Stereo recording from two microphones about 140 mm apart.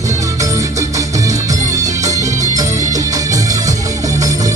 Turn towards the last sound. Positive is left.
turn(degrees=-25)  # may be behind; listen again after turning